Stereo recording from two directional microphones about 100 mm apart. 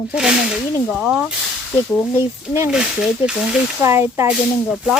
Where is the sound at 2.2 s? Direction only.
25° right (ahead or behind).